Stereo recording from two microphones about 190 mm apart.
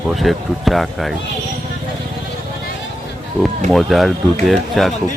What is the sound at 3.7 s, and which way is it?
Speech, centre (ahead or behind).